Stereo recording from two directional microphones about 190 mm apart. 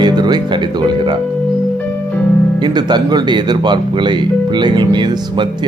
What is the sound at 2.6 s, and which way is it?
Speech, 20° right (ahead or behind).